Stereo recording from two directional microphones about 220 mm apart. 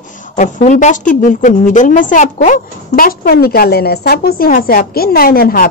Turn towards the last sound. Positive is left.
turn(degrees=40)  # may be behind; listen again after turning